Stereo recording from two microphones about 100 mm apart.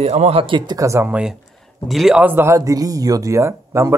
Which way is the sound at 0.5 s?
40° right (ahead or behind).